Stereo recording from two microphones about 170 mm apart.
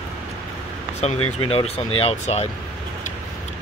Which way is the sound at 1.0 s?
35° left (ahead or behind).